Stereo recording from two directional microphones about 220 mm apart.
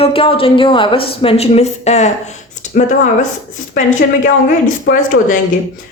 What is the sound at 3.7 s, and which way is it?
Speech, 35° left (ahead or behind).